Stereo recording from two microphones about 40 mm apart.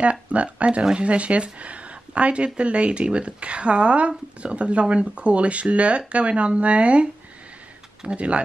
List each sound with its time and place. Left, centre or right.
0.0 s speech: right